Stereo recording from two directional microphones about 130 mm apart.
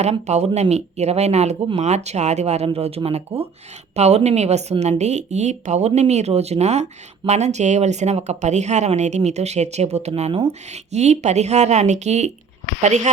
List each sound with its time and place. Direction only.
0.0 s speech: 60° right (ahead or behind)